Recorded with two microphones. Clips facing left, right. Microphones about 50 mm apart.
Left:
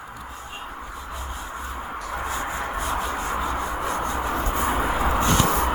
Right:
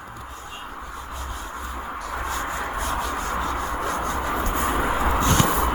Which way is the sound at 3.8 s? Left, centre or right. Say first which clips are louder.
Even; left.